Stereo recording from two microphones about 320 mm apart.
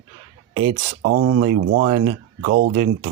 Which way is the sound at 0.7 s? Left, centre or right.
Right.